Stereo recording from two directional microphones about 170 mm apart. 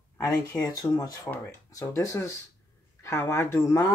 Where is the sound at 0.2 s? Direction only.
20° left (ahead or behind).